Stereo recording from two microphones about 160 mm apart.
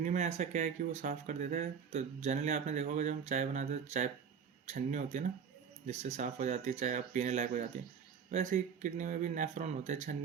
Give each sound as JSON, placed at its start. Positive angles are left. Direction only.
{"t": 0.0, "sound": "speech", "side_deg": -45}